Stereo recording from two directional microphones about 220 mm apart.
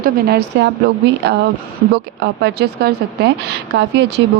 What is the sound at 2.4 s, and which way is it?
Speech, 50° right (ahead or behind).